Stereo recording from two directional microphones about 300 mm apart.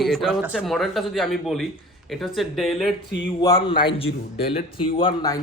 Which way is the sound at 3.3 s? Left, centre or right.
Centre.